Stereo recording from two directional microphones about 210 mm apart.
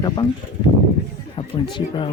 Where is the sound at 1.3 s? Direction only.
25° left (ahead or behind).